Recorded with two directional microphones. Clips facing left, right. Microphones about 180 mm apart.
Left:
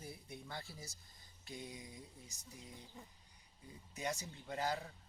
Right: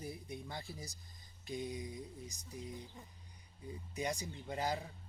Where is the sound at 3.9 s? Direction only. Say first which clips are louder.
Right 3 dB; 15° right (ahead or behind).